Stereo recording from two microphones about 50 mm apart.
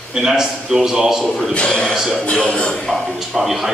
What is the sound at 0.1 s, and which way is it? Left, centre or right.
A man's voice, centre.